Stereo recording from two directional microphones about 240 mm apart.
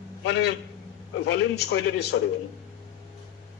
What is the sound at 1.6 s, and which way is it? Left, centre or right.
Speech, left.